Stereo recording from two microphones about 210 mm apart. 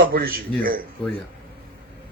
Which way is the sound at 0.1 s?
45° right (ahead or behind).